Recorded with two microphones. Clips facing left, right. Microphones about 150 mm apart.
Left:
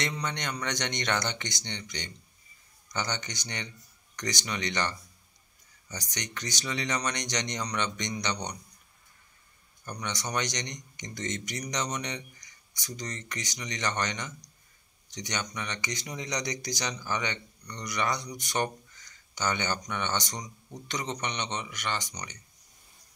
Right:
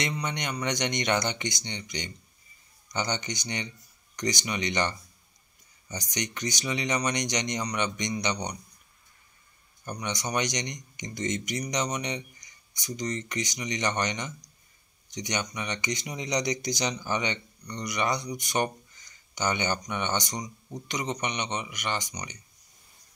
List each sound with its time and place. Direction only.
0.0 s speech: 15° right (ahead or behind)
9.8 s speech: 15° right (ahead or behind)